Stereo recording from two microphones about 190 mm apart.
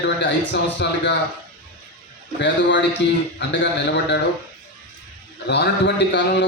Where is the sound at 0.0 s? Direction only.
65° left (ahead or behind).